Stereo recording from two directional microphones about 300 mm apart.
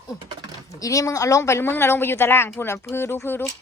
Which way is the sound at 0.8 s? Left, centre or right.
Centre.